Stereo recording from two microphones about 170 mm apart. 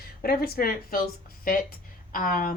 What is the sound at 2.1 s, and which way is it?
Speech, 55° left (ahead or behind).